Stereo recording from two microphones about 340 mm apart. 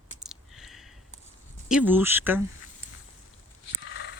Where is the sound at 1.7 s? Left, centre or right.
Centre.